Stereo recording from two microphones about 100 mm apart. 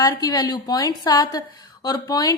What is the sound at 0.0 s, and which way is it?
A woman's voice, 40° left (ahead or behind).